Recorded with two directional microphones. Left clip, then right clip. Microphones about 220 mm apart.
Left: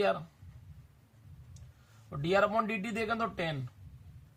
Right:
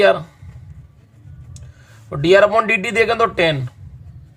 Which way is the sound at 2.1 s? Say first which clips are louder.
Right 17 dB; 40° right (ahead or behind).